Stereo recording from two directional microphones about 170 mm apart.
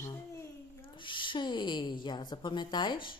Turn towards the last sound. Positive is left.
turn(degrees=25)  # may be behind; listen again after turning